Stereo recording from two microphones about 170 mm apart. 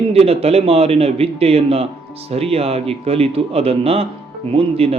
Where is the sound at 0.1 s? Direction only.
35° right (ahead or behind).